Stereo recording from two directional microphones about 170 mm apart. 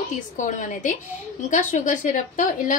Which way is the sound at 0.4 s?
50° left (ahead or behind).